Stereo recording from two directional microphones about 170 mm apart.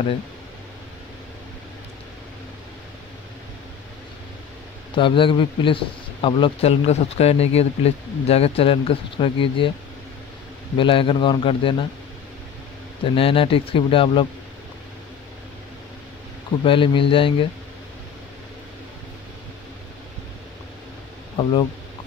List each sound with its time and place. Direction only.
4.9 s speech: 30° left (ahead or behind)
10.8 s speech: 30° left (ahead or behind)
13.0 s speech: 30° left (ahead or behind)
16.6 s speech: 30° left (ahead or behind)
21.4 s speech: 30° left (ahead or behind)